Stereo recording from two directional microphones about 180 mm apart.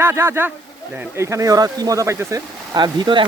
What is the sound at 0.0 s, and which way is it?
Speech, 15° right (ahead or behind).